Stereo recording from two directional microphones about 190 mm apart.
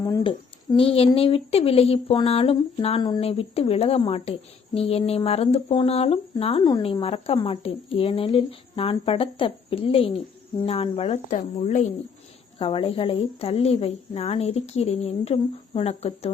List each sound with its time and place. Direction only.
0.0 s speech: 20° left (ahead or behind)